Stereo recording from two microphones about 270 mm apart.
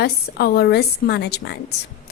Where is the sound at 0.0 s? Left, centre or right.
Left.